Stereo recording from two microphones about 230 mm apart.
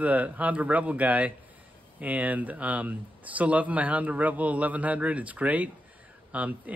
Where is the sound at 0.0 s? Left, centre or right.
Centre.